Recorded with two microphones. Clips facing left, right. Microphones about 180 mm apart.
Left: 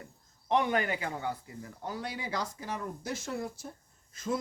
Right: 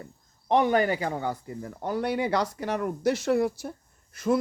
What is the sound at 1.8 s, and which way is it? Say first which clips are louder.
A man's voice: right 11 dB; 60° right (ahead or behind).